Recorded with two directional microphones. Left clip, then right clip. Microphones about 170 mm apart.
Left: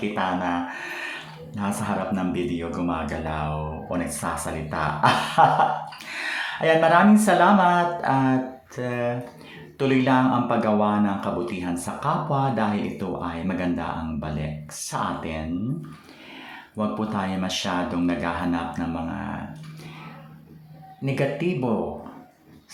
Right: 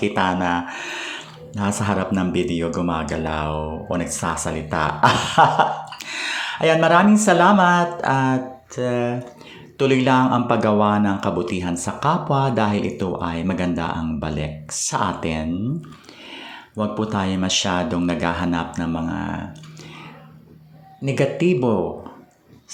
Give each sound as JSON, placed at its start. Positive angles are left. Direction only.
{"t": 0.0, "sound": "speech", "side_deg": -30}
{"t": 16.7, "sound": "speech", "side_deg": -20}
{"t": 21.0, "sound": "speech", "side_deg": -25}